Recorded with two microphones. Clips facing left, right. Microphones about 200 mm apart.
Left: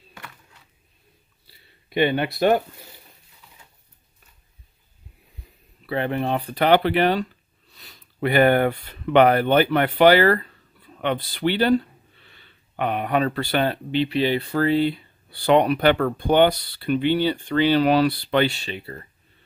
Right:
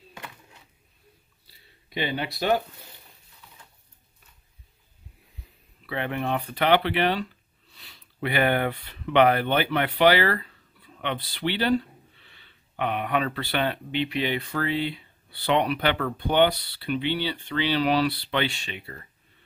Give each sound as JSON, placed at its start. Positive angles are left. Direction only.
{"t": 0.1, "sound": "a sound", "side_deg": -20}
{"t": 1.9, "sound": "speech", "side_deg": 60}
{"t": 5.9, "sound": "speech", "side_deg": 35}